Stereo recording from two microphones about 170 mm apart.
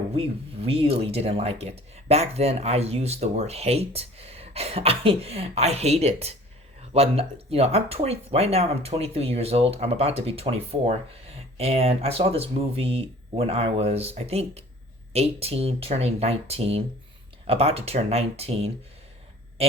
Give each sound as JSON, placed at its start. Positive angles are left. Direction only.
{"t": 0.2, "sound": "speech", "side_deg": -35}